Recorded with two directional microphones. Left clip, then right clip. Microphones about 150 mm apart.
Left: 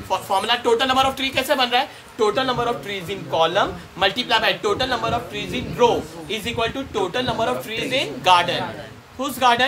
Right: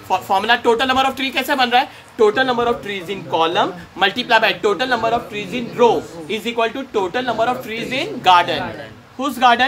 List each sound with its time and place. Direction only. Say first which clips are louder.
0.1 s a woman's voice: right 4 dB; 70° right (ahead or behind)
9.2 s speech: right 4 dB; 50° right (ahead or behind)